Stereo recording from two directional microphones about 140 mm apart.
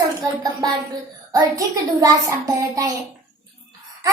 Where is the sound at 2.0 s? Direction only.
25° right (ahead or behind).